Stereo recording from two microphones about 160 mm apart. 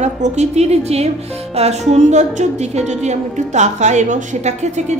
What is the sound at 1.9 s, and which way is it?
A woman's voice, 45° right (ahead or behind).